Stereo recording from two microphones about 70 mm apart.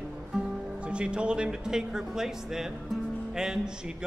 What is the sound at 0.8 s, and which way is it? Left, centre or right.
Speech, centre.